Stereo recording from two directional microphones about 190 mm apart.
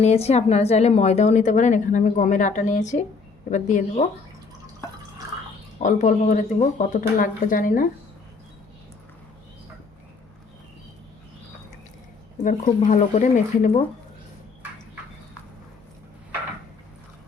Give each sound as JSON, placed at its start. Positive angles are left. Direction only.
{"t": 0.0, "sound": "a woman's voice", "side_deg": 35}
{"t": 5.8, "sound": "speech", "side_deg": 40}
{"t": 12.4, "sound": "a woman's voice", "side_deg": 40}